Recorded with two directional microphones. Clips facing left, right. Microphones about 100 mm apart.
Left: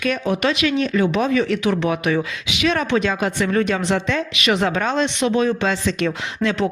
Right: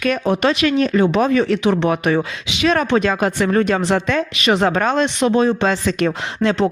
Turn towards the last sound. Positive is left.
turn(degrees=-30)  # may be behind; listen again after turning